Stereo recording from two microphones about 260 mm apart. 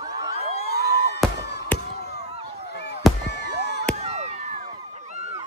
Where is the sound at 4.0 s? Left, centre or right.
Right.